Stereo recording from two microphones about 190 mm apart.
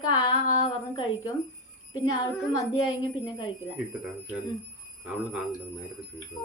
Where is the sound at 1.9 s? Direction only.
25° left (ahead or behind).